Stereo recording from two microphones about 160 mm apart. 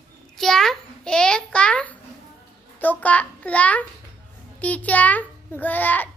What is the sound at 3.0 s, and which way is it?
A child's voice, 10° left (ahead or behind).